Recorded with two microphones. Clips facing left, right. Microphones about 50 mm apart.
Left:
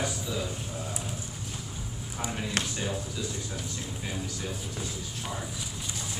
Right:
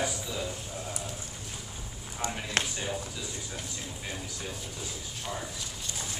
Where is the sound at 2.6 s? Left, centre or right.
Right.